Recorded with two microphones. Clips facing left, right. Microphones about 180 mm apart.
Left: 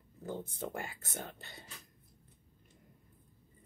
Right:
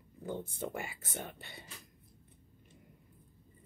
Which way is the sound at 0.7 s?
10° right (ahead or behind).